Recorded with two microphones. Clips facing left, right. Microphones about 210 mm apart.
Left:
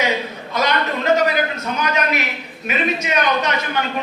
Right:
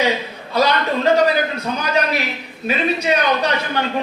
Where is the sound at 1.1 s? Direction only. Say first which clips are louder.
Left 1 dB; 35° right (ahead or behind).